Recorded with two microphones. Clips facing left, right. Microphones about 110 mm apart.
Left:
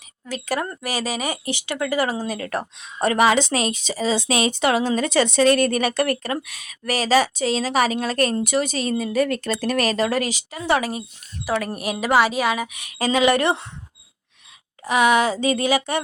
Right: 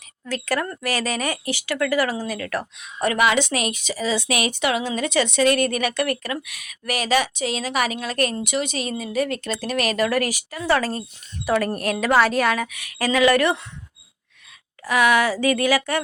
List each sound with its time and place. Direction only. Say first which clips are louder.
0.3 s speech: right 1 dB; 15° left (ahead or behind)
11.4 s a woman's voice: right 3 dB; centre (ahead or behind)
12.6 s speech: left 1 dB; 20° left (ahead or behind)
14.8 s speech: left 1 dB; 20° left (ahead or behind)